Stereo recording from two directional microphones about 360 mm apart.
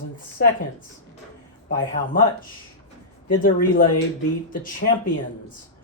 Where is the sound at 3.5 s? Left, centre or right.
Left.